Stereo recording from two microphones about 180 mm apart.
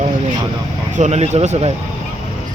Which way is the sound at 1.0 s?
40° right (ahead or behind).